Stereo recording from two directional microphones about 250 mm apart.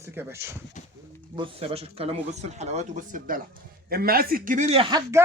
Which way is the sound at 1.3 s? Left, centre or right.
Right.